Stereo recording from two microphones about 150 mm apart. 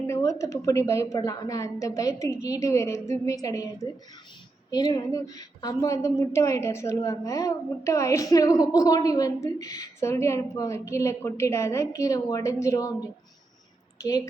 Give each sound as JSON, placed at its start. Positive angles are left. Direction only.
{"t": 0.1, "sound": "a woman's voice", "side_deg": 20}
{"t": 14.0, "sound": "a woman's voice", "side_deg": 20}